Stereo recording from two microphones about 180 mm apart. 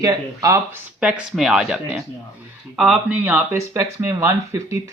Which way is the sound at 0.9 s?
5° right (ahead or behind).